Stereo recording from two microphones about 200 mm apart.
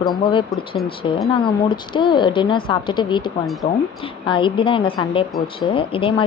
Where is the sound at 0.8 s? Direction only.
25° left (ahead or behind).